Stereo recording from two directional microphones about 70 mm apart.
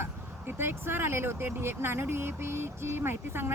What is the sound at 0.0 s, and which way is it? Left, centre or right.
Speech, right.